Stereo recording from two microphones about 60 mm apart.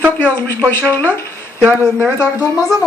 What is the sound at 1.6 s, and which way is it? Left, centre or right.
Speech, right.